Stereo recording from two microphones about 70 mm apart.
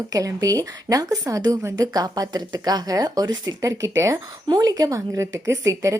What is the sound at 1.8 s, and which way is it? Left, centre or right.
Speech, right.